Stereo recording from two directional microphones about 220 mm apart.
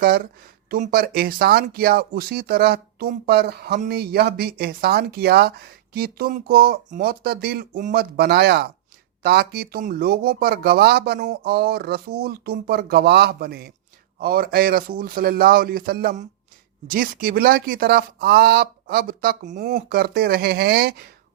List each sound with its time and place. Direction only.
0.7 s speech: 40° right (ahead or behind)